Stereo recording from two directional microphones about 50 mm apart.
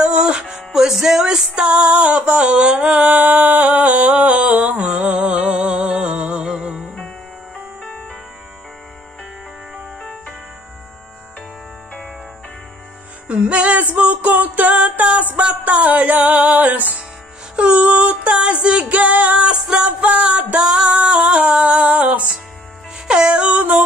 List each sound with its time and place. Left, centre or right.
0.0 s music: right
13.3 s music: right